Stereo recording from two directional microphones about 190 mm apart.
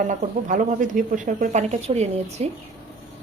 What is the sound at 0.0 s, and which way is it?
Speech, 40° right (ahead or behind).